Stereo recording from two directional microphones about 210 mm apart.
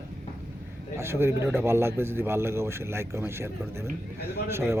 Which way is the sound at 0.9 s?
10° right (ahead or behind).